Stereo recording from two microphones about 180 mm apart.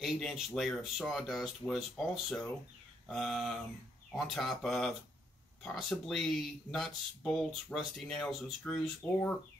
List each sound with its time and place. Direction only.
0.0 s speech: centre (ahead or behind)